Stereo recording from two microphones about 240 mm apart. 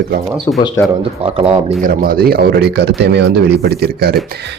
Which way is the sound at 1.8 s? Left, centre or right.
Right.